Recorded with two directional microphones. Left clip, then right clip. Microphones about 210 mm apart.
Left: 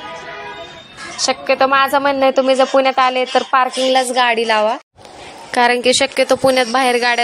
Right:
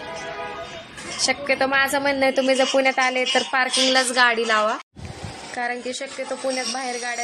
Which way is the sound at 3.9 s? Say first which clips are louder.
Left 4 dB; 20° left (ahead or behind).